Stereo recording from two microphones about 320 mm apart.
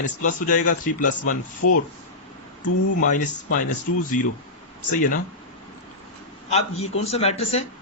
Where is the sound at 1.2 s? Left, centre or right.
Left.